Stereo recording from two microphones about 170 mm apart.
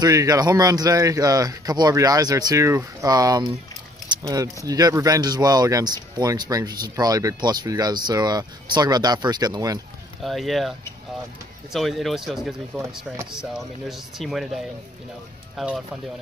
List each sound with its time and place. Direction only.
0.0 s speech: 20° right (ahead or behind)
4.1 s a sound: 25° right (ahead or behind)
4.6 s speech: 20° right (ahead or behind)
10.2 s speech: centre (ahead or behind)
11.7 s speech: centre (ahead or behind)